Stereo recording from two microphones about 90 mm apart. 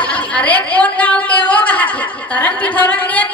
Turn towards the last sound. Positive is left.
turn(degrees=15)  # may be behind; listen again after turning